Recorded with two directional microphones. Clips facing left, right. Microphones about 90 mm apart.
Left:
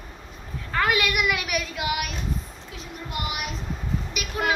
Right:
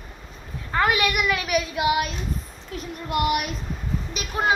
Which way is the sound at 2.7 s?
55° right (ahead or behind).